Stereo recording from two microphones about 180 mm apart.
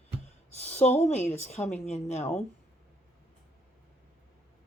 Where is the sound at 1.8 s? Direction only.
40° left (ahead or behind).